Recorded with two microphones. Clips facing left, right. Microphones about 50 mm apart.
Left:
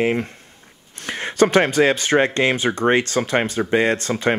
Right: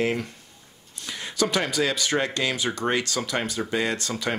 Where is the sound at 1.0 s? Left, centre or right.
Left.